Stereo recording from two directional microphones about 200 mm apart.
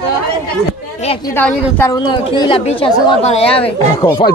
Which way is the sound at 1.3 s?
10° left (ahead or behind).